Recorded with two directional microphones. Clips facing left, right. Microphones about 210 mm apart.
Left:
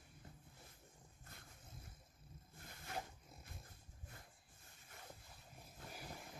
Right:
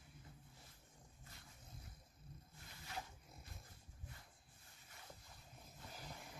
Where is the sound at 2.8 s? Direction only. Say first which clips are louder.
Left 3 dB; 50° left (ahead or behind).